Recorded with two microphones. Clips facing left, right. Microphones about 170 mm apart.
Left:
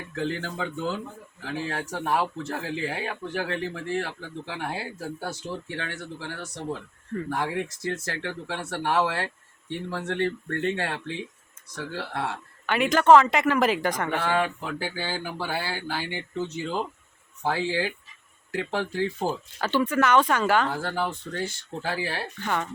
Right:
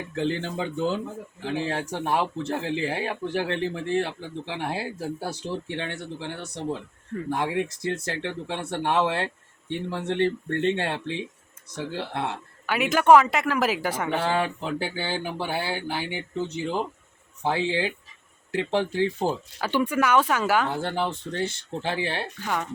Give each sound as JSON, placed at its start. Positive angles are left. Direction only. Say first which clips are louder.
{"t": 0.2, "sound": "speech", "louder": "right 2 dB", "side_deg": -25}
{"t": 12.6, "sound": "speech", "louder": "even", "side_deg": -5}
{"t": 14.3, "sound": "speech", "louder": "even", "side_deg": -25}
{"t": 17.4, "sound": "speech", "louder": "right 1 dB", "side_deg": -20}
{"t": 20.7, "sound": "speech", "louder": "right 1 dB", "side_deg": -25}
{"t": 22.4, "sound": "speech", "louder": "even", "side_deg": -5}